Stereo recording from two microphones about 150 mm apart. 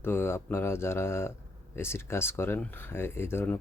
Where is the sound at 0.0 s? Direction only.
15° left (ahead or behind).